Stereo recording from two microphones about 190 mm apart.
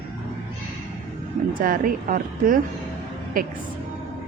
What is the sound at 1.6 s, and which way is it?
Speech, 45° right (ahead or behind).